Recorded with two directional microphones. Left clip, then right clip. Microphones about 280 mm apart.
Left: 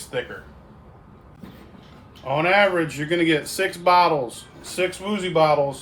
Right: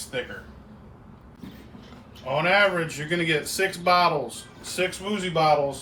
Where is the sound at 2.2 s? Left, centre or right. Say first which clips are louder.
Left 2 dB; left.